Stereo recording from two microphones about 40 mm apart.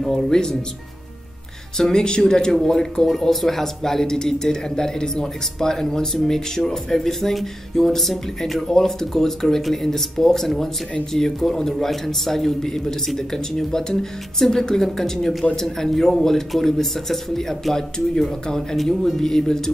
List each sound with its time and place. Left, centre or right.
0.3 s speech: centre
1.8 s speech: centre